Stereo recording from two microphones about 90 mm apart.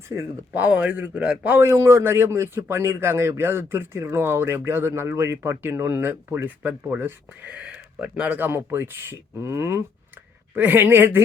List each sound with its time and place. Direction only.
0.5 s speech: 15° right (ahead or behind)
1.5 s speech: 35° right (ahead or behind)
10.5 s speech: 20° right (ahead or behind)